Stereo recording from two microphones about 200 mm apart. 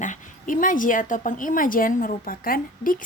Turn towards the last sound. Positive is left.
turn(degrees=45)  # may be behind; listen again after turning